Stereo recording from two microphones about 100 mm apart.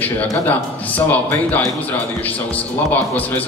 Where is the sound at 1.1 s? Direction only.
15° left (ahead or behind).